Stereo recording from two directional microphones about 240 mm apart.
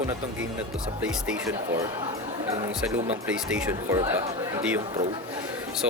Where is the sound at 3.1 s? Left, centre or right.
Centre.